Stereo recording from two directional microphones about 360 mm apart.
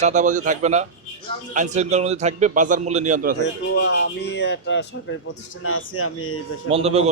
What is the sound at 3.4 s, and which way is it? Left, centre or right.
Speech, left.